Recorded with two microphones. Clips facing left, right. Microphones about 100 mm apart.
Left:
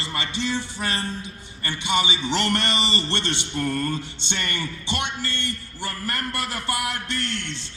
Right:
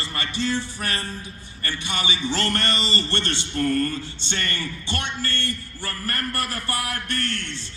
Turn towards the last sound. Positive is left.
turn(degrees=20)  # may be behind; listen again after turning